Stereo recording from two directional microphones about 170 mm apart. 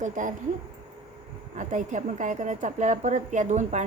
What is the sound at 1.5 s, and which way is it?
A woman's voice, 50° right (ahead or behind).